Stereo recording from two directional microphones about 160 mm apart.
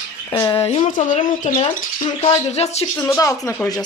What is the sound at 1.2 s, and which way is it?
Speech, 55° left (ahead or behind).